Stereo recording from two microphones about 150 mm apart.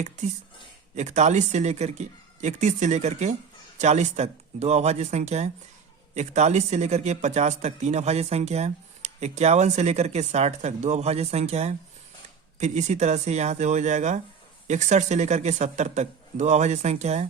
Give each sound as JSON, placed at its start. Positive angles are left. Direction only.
{"t": 0.9, "sound": "speech", "side_deg": -50}